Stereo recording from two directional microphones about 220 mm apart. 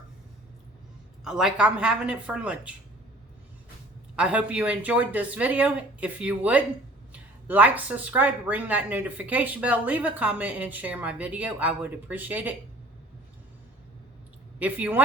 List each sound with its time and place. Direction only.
1.2 s speech: centre (ahead or behind)
4.1 s speech: 5° right (ahead or behind)
14.6 s speech: 5° right (ahead or behind)